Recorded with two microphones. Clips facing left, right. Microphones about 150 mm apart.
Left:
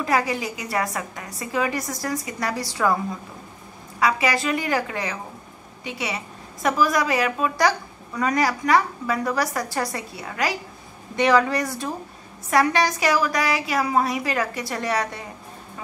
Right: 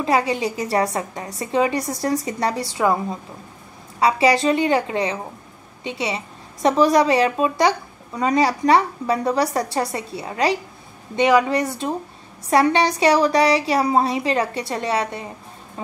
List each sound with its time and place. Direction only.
0.0 s a woman's voice: 25° right (ahead or behind)
4.0 s a woman's voice: 30° right (ahead or behind)